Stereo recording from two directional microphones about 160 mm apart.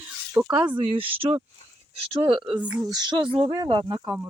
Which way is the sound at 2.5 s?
10° right (ahead or behind).